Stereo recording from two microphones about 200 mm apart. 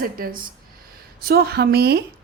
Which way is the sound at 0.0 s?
45° right (ahead or behind).